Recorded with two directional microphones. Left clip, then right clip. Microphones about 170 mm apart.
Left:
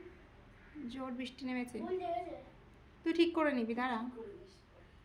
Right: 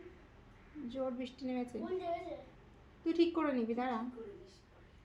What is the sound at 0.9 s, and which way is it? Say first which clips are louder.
Speech: right 5 dB; 30° left (ahead or behind).